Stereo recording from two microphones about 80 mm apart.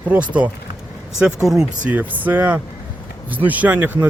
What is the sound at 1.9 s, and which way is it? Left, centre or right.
Speech, right.